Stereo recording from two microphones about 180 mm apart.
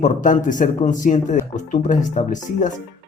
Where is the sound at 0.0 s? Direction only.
45° left (ahead or behind).